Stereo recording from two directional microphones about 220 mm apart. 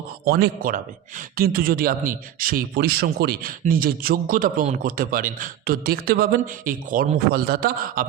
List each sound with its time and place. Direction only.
0.3 s a man's voice: 45° right (ahead or behind)